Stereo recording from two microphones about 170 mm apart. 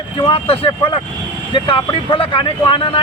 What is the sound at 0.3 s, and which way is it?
Speech, 35° left (ahead or behind).